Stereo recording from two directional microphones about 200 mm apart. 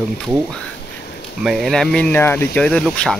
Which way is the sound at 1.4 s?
Centre (ahead or behind).